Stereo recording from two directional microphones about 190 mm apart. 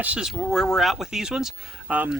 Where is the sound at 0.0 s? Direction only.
5° right (ahead or behind).